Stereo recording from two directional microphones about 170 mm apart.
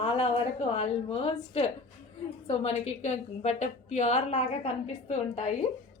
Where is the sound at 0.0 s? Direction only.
35° left (ahead or behind).